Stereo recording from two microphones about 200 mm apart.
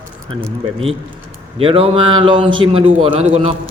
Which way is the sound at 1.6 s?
30° right (ahead or behind).